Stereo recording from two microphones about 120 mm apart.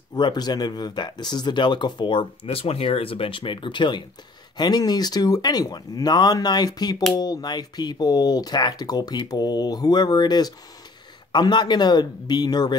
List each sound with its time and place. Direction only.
0.1 s speech: 35° left (ahead or behind)